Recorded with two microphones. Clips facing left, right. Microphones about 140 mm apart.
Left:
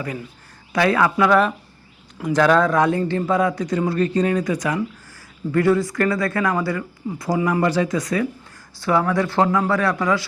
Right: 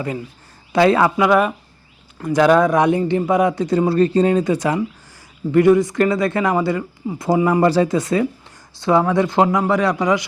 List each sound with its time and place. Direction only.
0.7 s speech: 25° right (ahead or behind)
1.1 s speech: 10° right (ahead or behind)